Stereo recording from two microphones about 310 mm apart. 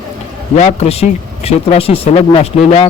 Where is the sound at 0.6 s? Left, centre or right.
Centre.